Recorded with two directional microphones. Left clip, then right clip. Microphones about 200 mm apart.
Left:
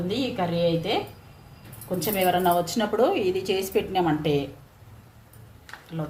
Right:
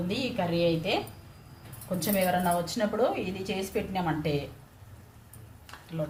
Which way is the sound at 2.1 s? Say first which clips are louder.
Left 5 dB; 30° left (ahead or behind).